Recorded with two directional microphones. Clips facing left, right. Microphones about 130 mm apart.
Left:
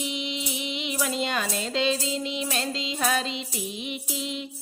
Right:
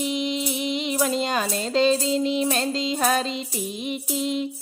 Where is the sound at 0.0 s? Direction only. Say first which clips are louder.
Right 7 dB; 45° right (ahead or behind).